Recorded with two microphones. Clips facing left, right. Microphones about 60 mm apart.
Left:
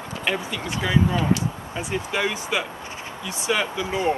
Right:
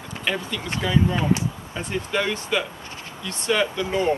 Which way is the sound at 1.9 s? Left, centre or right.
Centre.